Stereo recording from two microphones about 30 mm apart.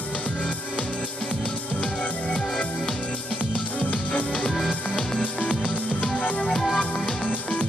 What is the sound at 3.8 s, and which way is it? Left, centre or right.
Music, left.